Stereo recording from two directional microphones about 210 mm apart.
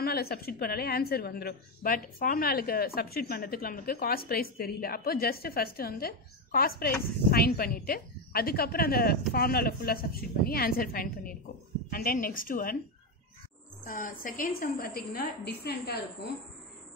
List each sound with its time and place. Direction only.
0.0 s a woman's voice: 45° left (ahead or behind)
13.8 s a woman's voice: 40° left (ahead or behind)